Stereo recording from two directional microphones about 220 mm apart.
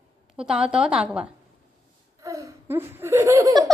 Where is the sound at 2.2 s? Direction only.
15° right (ahead or behind).